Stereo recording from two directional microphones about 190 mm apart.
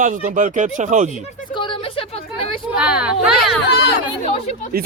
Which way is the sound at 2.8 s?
5° right (ahead or behind).